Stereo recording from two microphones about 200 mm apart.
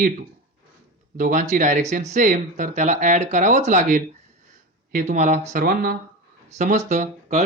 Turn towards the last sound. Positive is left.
turn(degrees=-35)  # may be behind; listen again after turning